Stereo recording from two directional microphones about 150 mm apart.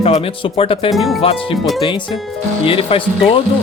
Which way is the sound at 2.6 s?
40° left (ahead or behind).